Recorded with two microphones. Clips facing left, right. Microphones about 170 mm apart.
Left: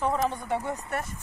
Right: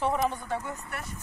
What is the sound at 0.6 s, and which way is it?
Speech, 40° left (ahead or behind).